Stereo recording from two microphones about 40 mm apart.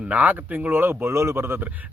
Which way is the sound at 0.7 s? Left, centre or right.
Right.